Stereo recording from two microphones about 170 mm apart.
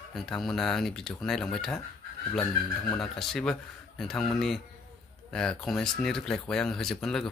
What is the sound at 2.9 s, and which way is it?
Speech, centre (ahead or behind).